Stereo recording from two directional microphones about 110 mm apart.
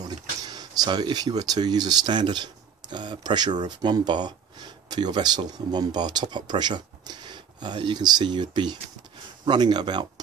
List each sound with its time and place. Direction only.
0.0 s speech: 40° right (ahead or behind)